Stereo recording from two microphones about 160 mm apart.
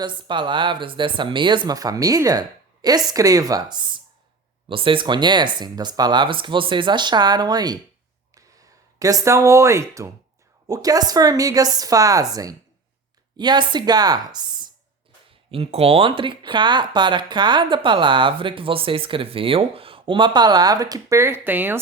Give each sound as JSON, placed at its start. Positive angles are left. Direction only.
{"t": 0.0, "sound": "speech", "side_deg": -30}
{"t": 9.0, "sound": "speech", "side_deg": -20}
{"t": 15.5, "sound": "speech", "side_deg": -40}